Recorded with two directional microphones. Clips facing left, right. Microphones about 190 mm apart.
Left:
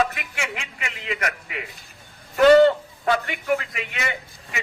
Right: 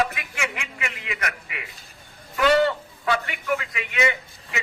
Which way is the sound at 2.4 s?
45° left (ahead or behind).